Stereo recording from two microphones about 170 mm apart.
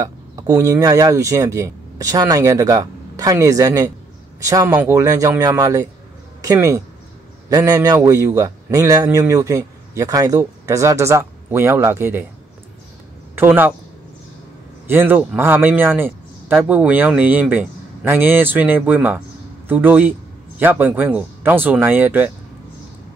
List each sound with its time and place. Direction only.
0.0 s a man's voice: 20° right (ahead or behind)
13.4 s speech: 10° right (ahead or behind)
14.9 s a man's voice: 10° right (ahead or behind)